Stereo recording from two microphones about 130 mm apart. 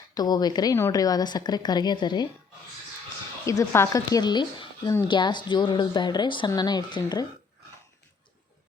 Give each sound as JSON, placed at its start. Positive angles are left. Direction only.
{"t": 0.1, "sound": "a woman's voice", "side_deg": 30}
{"t": 3.4, "sound": "a woman's voice", "side_deg": 25}